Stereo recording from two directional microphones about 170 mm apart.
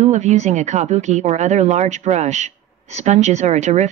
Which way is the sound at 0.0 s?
45° right (ahead or behind).